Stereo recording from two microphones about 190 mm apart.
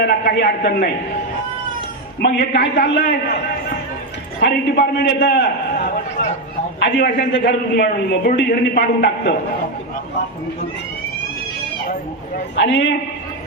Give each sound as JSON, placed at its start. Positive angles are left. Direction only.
{"t": 0.0, "sound": "a man's voice", "side_deg": 55}
{"t": 2.2, "sound": "a man's voice", "side_deg": 60}
{"t": 12.5, "sound": "a man's voice", "side_deg": 65}